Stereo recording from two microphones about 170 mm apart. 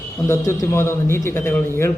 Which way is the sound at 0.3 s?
15° left (ahead or behind).